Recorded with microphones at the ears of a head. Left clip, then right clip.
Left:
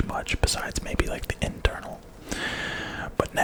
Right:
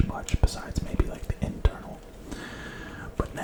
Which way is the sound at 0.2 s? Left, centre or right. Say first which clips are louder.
Left 7 dB; left.